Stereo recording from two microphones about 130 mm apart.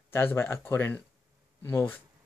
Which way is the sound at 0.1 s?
20° left (ahead or behind).